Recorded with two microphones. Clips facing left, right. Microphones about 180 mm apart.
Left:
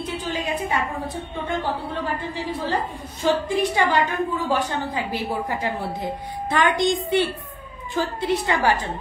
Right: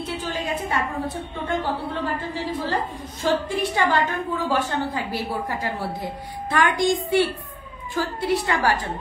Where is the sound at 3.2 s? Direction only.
15° left (ahead or behind).